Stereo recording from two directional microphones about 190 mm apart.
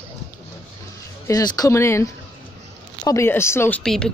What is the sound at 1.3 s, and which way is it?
Speech, 20° left (ahead or behind).